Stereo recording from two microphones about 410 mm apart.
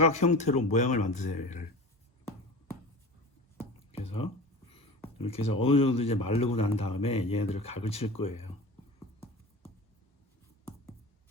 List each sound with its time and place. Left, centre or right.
0.1 s speech: centre
4.7 s speech: centre